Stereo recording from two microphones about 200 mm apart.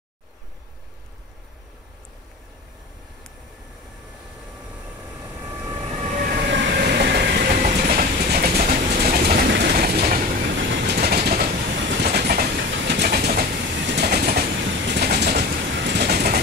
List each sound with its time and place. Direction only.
5.2 s vehicle: 15° right (ahead or behind)
5.8 s train: 35° right (ahead or behind)
6.5 s train: 60° right (ahead or behind)
10.6 s train: 60° right (ahead or behind)